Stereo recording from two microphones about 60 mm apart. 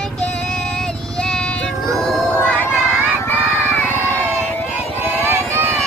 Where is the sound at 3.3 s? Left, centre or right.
Left.